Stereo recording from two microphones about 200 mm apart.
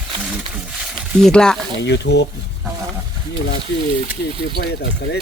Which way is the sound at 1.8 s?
60° left (ahead or behind).